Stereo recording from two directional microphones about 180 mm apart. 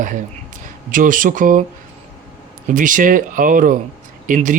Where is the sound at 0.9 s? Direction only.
50° right (ahead or behind).